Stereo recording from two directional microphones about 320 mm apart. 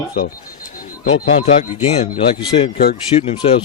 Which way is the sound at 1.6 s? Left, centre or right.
Centre.